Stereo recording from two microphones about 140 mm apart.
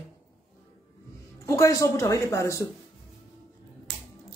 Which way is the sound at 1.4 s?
25° left (ahead or behind).